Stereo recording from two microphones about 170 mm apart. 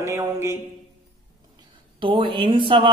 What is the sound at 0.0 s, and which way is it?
Mantra, 20° right (ahead or behind).